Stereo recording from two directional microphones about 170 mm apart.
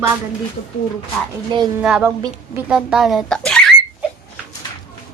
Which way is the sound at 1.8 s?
5° right (ahead or behind).